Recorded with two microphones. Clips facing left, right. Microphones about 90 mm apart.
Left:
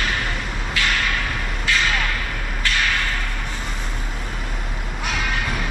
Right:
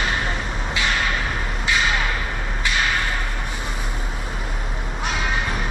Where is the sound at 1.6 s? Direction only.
15° right (ahead or behind).